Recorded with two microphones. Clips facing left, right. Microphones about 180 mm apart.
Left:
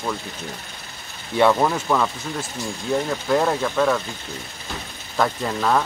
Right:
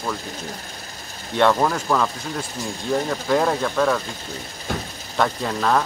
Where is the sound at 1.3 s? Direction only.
5° left (ahead or behind).